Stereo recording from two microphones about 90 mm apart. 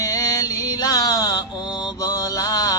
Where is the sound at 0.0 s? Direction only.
45° left (ahead or behind).